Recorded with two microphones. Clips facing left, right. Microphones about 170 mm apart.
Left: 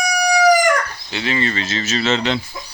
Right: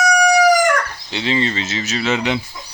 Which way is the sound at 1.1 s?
25° right (ahead or behind).